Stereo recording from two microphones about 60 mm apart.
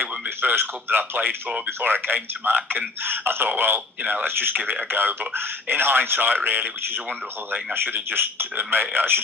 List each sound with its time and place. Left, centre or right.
0.0 s a man's voice: right
1.5 s speech: centre
1.8 s a man's voice: right